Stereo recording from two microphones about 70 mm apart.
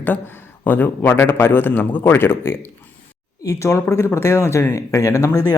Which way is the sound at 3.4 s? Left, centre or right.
Left.